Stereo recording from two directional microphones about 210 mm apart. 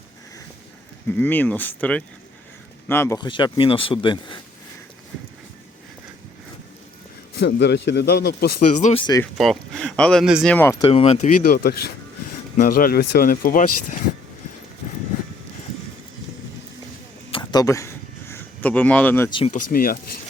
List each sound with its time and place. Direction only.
1.1 s a man's voice: 10° left (ahead or behind)
7.3 s speech: 55° left (ahead or behind)
8.8 s a man's voice: 25° left (ahead or behind)
9.4 s speech: centre (ahead or behind)
10.8 s a man's voice: 30° left (ahead or behind)
11.4 s speech: 45° left (ahead or behind)
17.3 s a sound: 20° left (ahead or behind)
19.5 s speech: 40° left (ahead or behind)